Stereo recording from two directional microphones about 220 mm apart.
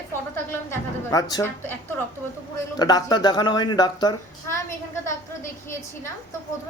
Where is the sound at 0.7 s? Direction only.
15° left (ahead or behind).